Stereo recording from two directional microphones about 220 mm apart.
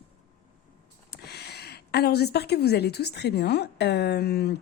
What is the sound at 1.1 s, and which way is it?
A woman's voice, 45° left (ahead or behind).